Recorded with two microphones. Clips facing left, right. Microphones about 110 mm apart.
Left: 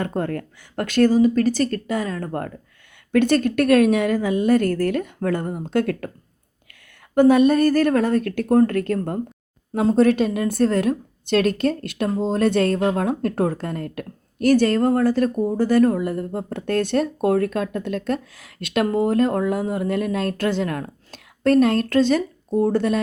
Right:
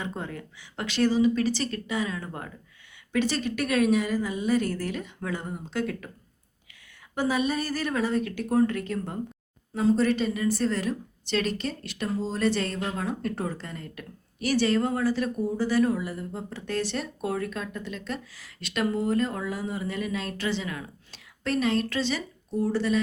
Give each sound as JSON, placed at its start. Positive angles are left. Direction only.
{"t": 0.0, "sound": "a woman's voice", "side_deg": 55}
{"t": 5.8, "sound": "speech", "side_deg": 65}
{"t": 7.2, "sound": "a woman's voice", "side_deg": 55}